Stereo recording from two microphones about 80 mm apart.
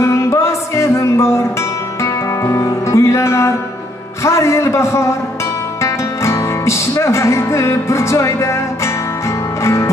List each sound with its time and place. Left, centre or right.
0.0 s music: left
2.4 s music: left
4.2 s a man's voice: left
5.8 s music: left